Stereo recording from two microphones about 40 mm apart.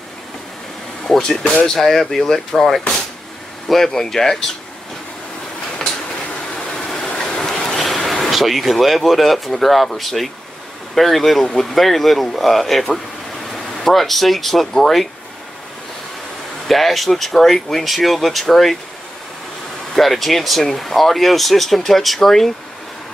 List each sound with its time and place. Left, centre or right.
1.0 s vehicle: centre
1.4 s speech: left
1.8 s speech: centre
6.5 s train: centre
7.8 s speech: centre
16.6 s speech: centre
20.0 s speech: centre